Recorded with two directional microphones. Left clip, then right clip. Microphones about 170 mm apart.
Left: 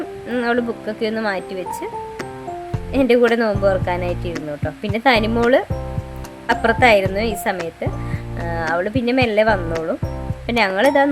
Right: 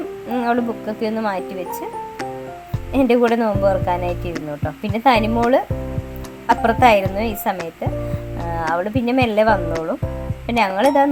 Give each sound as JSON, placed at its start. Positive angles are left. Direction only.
{"t": 0.3, "sound": "a woman's voice", "side_deg": 15}
{"t": 2.9, "sound": "speech", "side_deg": 5}
{"t": 3.4, "sound": "speech", "side_deg": 35}
{"t": 3.9, "sound": "a woman's voice", "side_deg": 0}
{"t": 8.7, "sound": "a woman's voice", "side_deg": 15}